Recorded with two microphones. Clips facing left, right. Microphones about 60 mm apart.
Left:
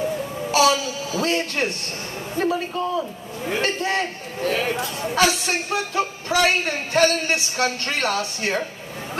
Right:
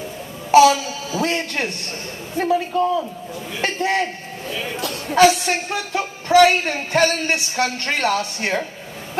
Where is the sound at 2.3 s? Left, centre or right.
Centre.